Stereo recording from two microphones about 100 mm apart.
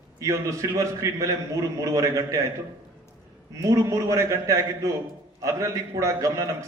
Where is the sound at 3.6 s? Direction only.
30° right (ahead or behind).